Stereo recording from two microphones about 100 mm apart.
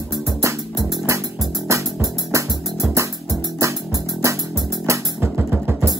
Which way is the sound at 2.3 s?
30° right (ahead or behind).